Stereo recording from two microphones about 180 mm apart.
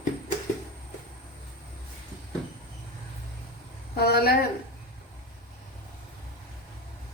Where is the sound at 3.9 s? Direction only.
60° left (ahead or behind).